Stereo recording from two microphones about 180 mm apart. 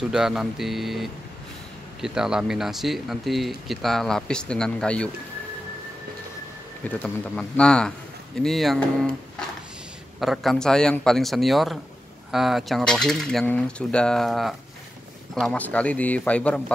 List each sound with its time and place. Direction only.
0.1 s speech: 5° right (ahead or behind)
7.0 s speech: 5° left (ahead or behind)
10.2 s speech: centre (ahead or behind)